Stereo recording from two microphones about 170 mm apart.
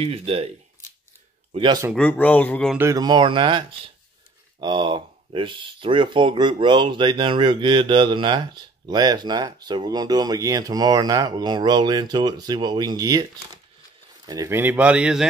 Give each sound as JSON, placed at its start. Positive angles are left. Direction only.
{"t": 0.0, "sound": "speech", "side_deg": -35}
{"t": 1.5, "sound": "speech", "side_deg": -30}
{"t": 2.0, "sound": "speech", "side_deg": 10}
{"t": 2.8, "sound": "speech", "side_deg": -20}